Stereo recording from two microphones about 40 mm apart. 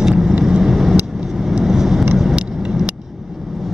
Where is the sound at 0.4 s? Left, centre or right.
Centre.